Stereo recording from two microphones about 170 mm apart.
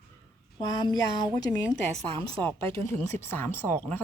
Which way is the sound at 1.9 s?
35° right (ahead or behind).